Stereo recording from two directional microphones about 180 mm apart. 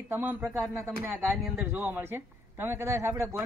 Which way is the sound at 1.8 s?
10° right (ahead or behind).